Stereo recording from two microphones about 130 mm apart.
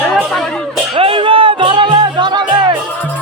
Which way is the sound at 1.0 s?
45° right (ahead or behind).